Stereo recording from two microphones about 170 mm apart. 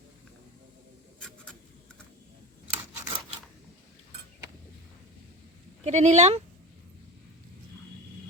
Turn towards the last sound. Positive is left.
turn(degrees=-40)  # may be behind; listen again after turning